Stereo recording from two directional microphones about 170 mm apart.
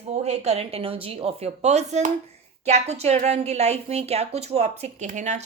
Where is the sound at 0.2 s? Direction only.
40° right (ahead or behind).